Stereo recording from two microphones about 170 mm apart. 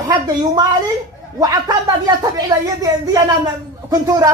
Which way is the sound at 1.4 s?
20° right (ahead or behind).